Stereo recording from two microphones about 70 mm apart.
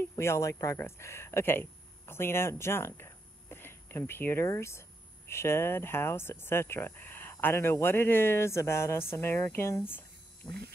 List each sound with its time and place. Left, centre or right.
0.2 s speech: left
0.7 s speech: left
9.8 s a sound: left